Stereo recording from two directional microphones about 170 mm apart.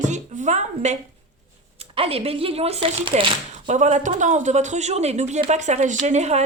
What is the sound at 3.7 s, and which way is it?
A woman's voice, 45° right (ahead or behind).